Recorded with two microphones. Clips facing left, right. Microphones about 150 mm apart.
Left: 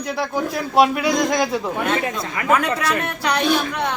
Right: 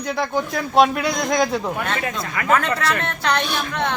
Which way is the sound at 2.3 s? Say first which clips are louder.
Even; 20° left (ahead or behind).